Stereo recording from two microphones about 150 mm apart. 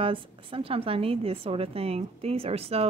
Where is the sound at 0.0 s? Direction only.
35° right (ahead or behind).